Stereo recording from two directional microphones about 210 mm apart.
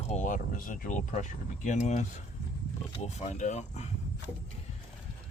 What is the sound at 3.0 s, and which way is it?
Speech, 35° left (ahead or behind).